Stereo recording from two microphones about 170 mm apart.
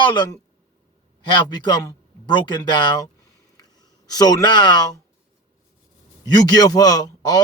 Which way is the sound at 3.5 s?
20° left (ahead or behind).